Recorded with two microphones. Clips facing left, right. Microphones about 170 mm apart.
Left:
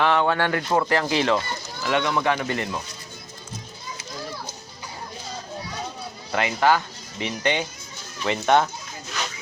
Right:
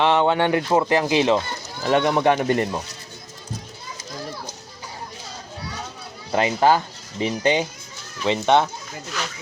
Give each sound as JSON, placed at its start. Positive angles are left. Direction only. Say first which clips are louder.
{"t": 0.0, "sound": "speech", "louder": "right 3 dB", "side_deg": -20}
{"t": 1.8, "sound": "speech", "louder": "right 5 dB", "side_deg": -40}
{"t": 6.3, "sound": "speech", "louder": "right 3 dB", "side_deg": -30}
{"t": 8.2, "sound": "speech", "louder": "right 2 dB", "side_deg": -20}